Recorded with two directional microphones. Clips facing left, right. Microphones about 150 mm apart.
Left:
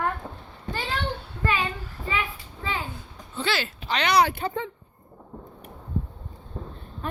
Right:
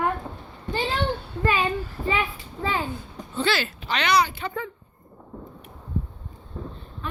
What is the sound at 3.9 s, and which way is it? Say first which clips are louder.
Speech: left 1 dB; 35° left (ahead or behind).